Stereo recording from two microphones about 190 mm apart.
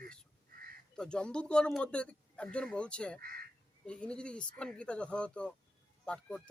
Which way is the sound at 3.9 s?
5° left (ahead or behind).